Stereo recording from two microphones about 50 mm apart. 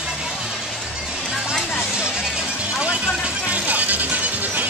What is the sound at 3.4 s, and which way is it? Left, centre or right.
Music, right.